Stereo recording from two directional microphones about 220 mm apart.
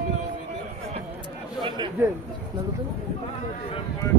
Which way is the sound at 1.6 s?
20° right (ahead or behind).